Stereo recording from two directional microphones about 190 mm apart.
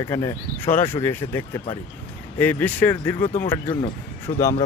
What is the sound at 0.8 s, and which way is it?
Speech, 10° left (ahead or behind).